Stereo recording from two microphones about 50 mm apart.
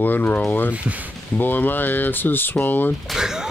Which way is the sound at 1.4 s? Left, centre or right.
Left.